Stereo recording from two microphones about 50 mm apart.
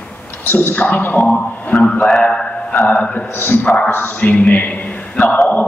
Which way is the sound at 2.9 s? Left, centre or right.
Left.